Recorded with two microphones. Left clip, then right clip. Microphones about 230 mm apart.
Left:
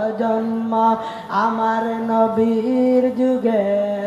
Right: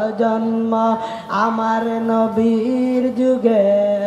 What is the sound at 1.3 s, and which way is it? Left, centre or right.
Music, right.